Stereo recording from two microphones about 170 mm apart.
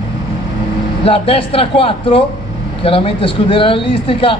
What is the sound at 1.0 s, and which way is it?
A man's voice, 35° left (ahead or behind).